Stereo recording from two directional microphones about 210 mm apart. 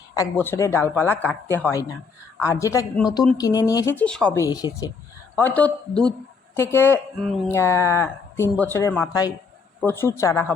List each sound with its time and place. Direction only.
0.1 s speech: 15° left (ahead or behind)
4.5 s speech: 15° left (ahead or behind); by 7.5 s centre (ahead or behind)
7.5 s speech: 10° left (ahead or behind)